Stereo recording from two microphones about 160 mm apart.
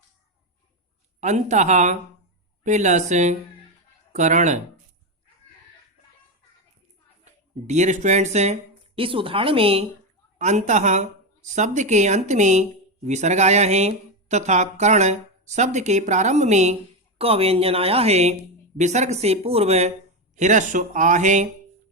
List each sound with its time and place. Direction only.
1.2 s speech: 45° right (ahead or behind)
7.3 s speech: 45° right (ahead or behind)
10.3 s speech: 45° right (ahead or behind)